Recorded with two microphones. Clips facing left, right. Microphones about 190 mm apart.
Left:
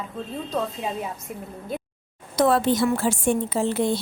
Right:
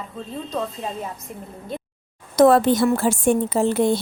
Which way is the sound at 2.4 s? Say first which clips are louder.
Right 5 dB; 45° right (ahead or behind).